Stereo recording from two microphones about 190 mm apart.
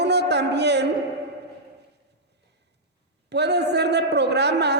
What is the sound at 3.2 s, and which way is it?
A man's voice, 60° right (ahead or behind).